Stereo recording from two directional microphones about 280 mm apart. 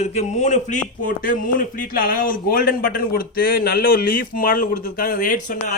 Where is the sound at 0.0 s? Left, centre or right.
Left.